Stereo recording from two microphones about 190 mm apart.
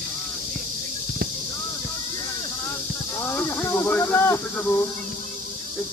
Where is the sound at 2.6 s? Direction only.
15° left (ahead or behind).